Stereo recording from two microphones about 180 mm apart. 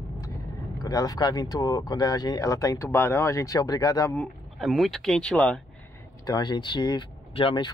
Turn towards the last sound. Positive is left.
turn(degrees=30)  # may be behind; listen again after turning